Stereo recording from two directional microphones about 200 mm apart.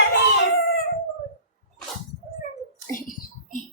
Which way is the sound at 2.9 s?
45° left (ahead or behind).